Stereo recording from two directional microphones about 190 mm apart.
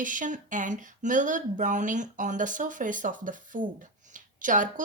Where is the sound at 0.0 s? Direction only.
45° right (ahead or behind).